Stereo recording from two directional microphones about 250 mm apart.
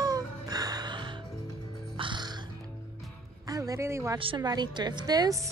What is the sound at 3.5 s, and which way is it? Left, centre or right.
A woman's voice, centre.